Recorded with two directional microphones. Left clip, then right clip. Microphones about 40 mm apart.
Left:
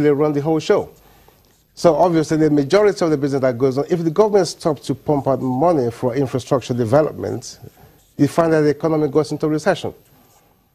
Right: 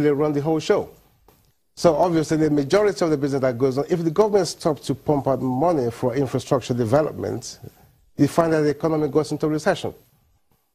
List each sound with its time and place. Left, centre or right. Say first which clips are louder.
0.0 s a man's voice: left 4 dB; left